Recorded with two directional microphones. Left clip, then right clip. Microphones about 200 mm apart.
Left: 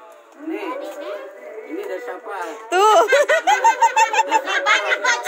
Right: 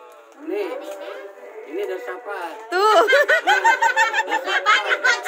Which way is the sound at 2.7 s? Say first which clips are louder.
Left 2 dB; centre (ahead or behind).